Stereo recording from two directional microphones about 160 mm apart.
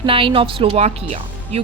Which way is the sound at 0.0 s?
35° right (ahead or behind).